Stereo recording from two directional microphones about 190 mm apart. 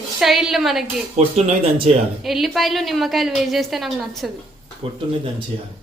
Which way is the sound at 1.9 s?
35° right (ahead or behind).